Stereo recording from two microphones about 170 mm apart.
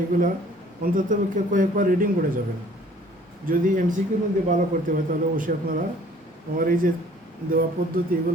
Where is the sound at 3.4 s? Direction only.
55° right (ahead or behind).